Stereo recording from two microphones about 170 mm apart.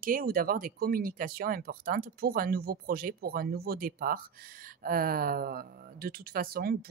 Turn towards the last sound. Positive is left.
turn(degrees=-60)  # may be behind; listen again after turning